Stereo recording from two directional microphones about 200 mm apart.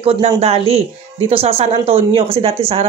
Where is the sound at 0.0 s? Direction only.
30° right (ahead or behind).